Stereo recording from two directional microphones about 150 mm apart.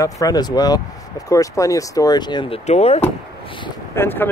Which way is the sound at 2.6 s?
45° left (ahead or behind).